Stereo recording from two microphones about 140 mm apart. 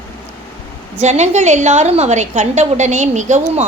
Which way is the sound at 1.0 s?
55° right (ahead or behind).